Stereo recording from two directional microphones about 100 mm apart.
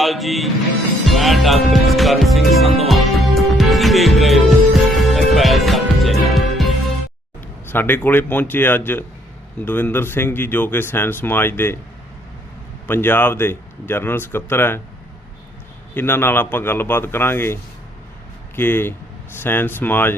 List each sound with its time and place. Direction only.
0.0 s music: centre (ahead or behind)
7.7 s speech: 20° left (ahead or behind)
12.9 s speech: 20° left (ahead or behind)
16.0 s speech: 20° left (ahead or behind)